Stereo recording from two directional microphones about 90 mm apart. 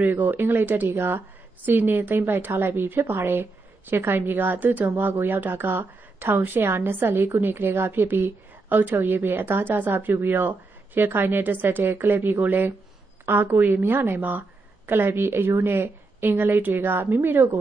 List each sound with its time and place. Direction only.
0.0 s a woman's voice: 20° right (ahead or behind)